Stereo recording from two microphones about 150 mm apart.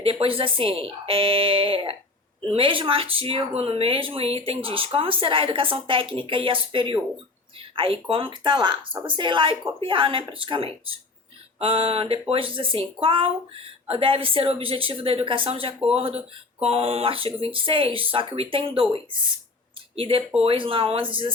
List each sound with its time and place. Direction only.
0.0 s speech: 40° right (ahead or behind)